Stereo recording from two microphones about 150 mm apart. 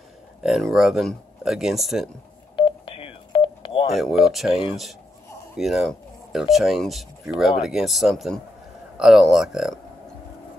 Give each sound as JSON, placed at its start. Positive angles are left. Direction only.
{"t": 0.4, "sound": "speech", "side_deg": 0}
{"t": 2.5, "sound": "telephone dialing", "side_deg": 35}
{"t": 3.9, "sound": "speech", "side_deg": 0}
{"t": 4.5, "sound": "speech", "side_deg": 40}
{"t": 5.6, "sound": "speech", "side_deg": 0}